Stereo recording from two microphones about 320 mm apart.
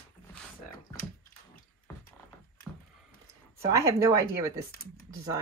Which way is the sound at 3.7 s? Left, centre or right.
Centre.